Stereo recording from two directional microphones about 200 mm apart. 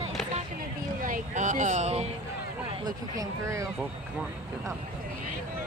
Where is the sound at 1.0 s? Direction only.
40° right (ahead or behind).